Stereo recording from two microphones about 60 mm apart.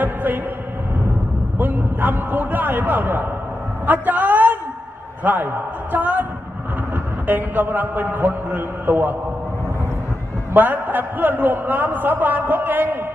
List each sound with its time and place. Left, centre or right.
0.0 s music: right
1.6 s a man's voice: right
7.2 s a man's voice: right
10.5 s a man's voice: right